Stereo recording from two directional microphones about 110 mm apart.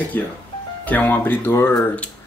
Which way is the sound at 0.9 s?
15° left (ahead or behind).